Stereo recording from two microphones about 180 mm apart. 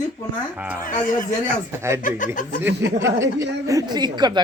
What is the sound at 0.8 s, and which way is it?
Speech, 50° left (ahead or behind).